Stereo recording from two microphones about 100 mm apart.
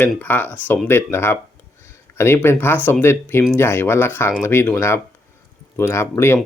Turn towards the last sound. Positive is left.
turn(degrees=25)  # may be behind; listen again after turning